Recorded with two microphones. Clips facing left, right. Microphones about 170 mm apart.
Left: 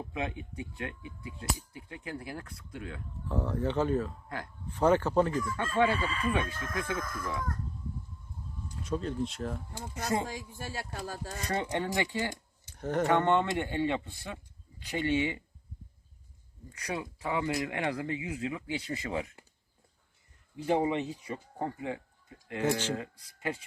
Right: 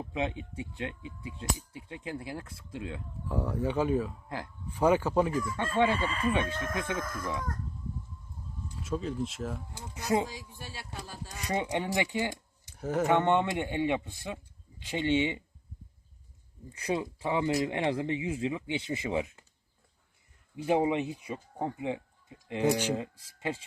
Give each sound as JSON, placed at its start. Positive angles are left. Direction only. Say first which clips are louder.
{"t": 0.1, "sound": "speech", "louder": "right 6 dB", "side_deg": -20}
{"t": 3.2, "sound": "speech", "louder": "even", "side_deg": -10}
{"t": 5.5, "sound": "speech", "louder": "right 1 dB", "side_deg": -25}
{"t": 8.8, "sound": "speech", "louder": "even", "side_deg": -5}
{"t": 10.3, "sound": "speech", "louder": "left 5 dB", "side_deg": 45}
{"t": 11.4, "sound": "speech", "louder": "right 1 dB", "side_deg": -15}
{"t": 16.7, "sound": "speech", "louder": "right 5 dB", "side_deg": -25}
{"t": 20.7, "sound": "speech", "louder": "right 1 dB", "side_deg": -15}
{"t": 23.0, "sound": "speech", "louder": "right 3 dB", "side_deg": -25}